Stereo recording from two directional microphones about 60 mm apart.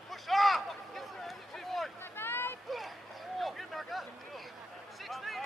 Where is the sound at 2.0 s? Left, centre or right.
Left.